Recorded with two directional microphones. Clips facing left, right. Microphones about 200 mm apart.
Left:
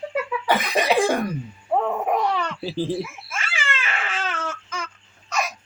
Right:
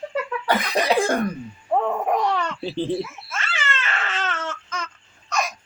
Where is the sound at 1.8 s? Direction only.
5° left (ahead or behind).